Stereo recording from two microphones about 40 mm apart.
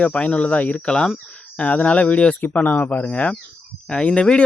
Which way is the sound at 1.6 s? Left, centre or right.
Left.